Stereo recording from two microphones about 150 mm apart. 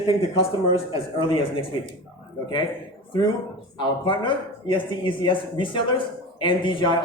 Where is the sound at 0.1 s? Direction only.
40° left (ahead or behind).